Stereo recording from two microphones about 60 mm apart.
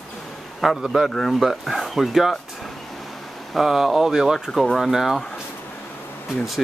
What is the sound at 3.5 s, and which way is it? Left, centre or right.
Speech, centre.